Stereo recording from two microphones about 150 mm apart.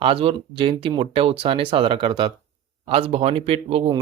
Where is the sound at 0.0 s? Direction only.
35° right (ahead or behind).